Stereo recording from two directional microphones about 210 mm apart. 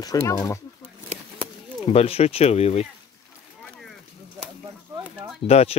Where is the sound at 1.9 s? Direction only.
30° left (ahead or behind).